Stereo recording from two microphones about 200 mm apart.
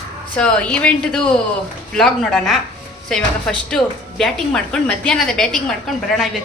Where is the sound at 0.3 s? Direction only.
5° left (ahead or behind).